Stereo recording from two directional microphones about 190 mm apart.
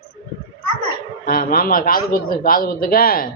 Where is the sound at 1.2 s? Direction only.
50° left (ahead or behind).